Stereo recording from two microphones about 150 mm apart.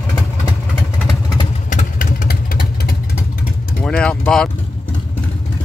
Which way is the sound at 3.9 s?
5° left (ahead or behind).